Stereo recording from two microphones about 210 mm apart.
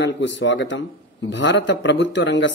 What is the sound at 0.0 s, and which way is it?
Speech, 60° left (ahead or behind).